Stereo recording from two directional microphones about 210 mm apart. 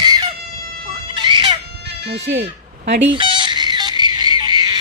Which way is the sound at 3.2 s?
25° right (ahead or behind).